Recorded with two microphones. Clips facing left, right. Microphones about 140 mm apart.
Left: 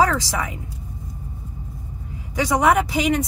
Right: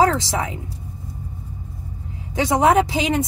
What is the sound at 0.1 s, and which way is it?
Speech, 25° right (ahead or behind).